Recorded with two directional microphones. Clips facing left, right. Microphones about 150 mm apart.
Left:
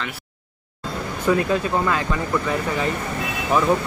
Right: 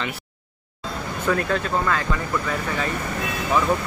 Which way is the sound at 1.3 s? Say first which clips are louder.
Left 3 dB; 15° left (ahead or behind).